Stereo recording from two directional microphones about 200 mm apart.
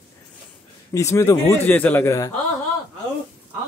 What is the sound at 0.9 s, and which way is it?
A man's voice, 15° left (ahead or behind).